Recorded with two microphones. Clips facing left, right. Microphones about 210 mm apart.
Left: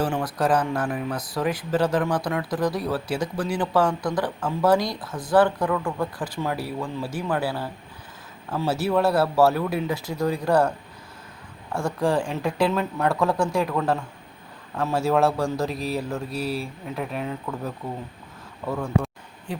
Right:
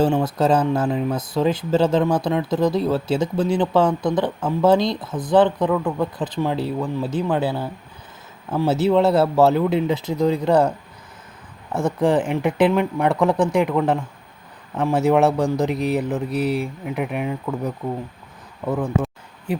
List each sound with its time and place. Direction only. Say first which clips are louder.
0.0 s speech: right 6 dB; 25° right (ahead or behind)
11.7 s speech: right 5 dB; 20° right (ahead or behind)